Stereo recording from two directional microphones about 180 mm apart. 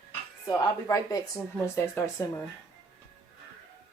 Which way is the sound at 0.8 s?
20° left (ahead or behind).